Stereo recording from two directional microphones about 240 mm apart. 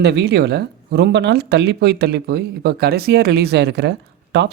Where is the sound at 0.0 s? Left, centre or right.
Right.